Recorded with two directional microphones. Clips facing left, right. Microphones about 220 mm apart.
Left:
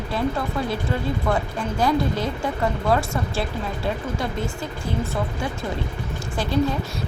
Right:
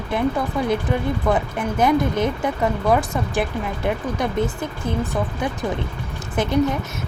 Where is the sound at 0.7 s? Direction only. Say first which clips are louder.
Right 4 dB; 20° right (ahead or behind).